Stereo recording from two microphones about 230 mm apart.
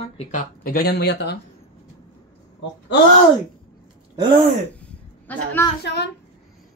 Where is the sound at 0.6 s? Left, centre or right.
Left.